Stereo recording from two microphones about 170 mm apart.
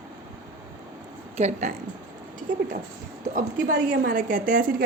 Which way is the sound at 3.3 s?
50° right (ahead or behind).